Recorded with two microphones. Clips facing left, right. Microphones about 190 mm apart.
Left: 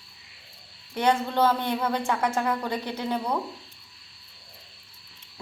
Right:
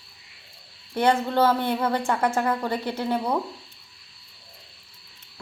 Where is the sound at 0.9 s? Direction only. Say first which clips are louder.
Right 2 dB; 10° right (ahead or behind).